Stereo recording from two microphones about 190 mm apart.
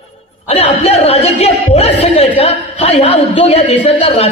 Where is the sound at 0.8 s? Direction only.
30° left (ahead or behind).